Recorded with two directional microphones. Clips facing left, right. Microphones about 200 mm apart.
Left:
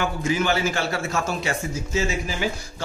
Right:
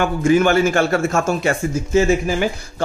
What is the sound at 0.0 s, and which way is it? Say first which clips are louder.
Speech: right 9 dB; 55° right (ahead or behind).